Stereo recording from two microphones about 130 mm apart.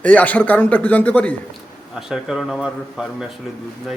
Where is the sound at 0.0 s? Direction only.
10° left (ahead or behind).